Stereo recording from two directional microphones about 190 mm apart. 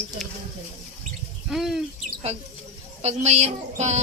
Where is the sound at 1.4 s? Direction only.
Centre (ahead or behind).